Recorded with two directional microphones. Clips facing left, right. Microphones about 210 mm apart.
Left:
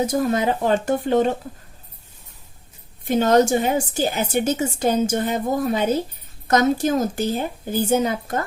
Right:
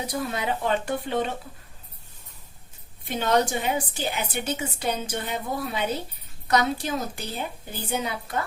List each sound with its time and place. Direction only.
0.0 s a woman's voice: 45° left (ahead or behind)
3.0 s a woman's voice: 45° left (ahead or behind)